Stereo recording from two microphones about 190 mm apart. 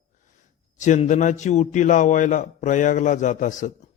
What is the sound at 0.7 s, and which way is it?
A man's voice, 40° left (ahead or behind).